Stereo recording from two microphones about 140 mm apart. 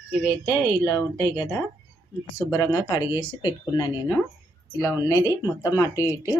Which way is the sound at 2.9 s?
30° left (ahead or behind).